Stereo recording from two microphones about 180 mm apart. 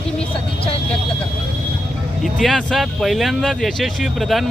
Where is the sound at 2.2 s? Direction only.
Centre (ahead or behind).